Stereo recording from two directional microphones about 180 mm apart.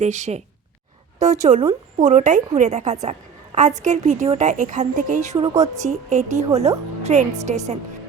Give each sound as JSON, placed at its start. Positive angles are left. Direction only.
{"t": 0.0, "sound": "a woman's voice", "side_deg": -40}